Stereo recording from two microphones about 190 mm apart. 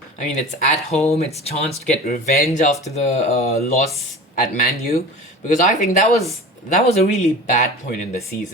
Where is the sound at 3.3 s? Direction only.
35° left (ahead or behind).